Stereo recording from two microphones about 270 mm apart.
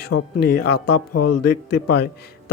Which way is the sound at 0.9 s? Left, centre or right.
Left.